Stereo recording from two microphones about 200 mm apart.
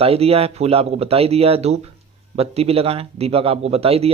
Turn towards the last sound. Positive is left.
turn(degrees=-30)  # may be behind; listen again after turning